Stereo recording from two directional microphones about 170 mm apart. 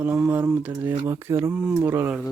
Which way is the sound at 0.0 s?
10° right (ahead or behind).